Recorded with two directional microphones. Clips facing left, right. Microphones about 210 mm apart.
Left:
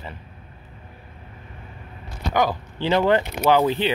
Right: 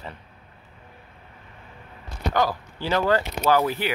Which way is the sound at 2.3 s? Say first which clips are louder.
Left 3 dB; 20° left (ahead or behind).